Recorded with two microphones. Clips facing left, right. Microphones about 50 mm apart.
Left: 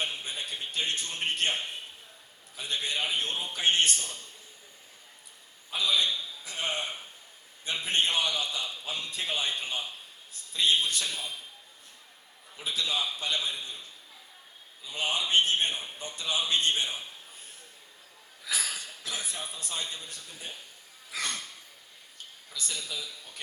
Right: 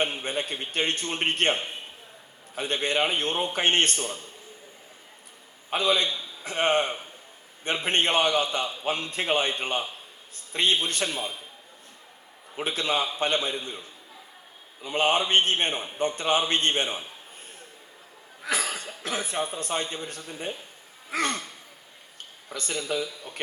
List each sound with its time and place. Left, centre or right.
0.0 s a man's voice: right
2.6 s a man's voice: right
5.7 s a man's voice: right
8.8 s a man's voice: right
12.5 s a man's voice: right
14.8 s a man's voice: right
18.4 s cough: right
19.0 s a man's voice: right
22.4 s a man's voice: right